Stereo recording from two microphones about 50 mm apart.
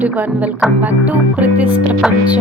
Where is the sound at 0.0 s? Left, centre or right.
Right.